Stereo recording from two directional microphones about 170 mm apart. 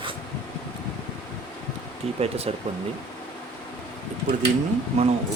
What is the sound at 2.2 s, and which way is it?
Speech, 35° right (ahead or behind).